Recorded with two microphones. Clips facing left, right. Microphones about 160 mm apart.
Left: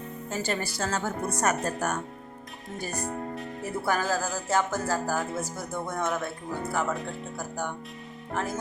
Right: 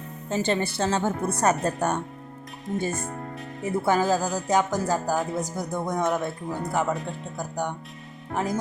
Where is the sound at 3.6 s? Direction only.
20° right (ahead or behind).